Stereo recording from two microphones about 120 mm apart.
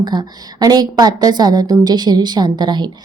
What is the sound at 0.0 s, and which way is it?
A woman's voice, 35° right (ahead or behind).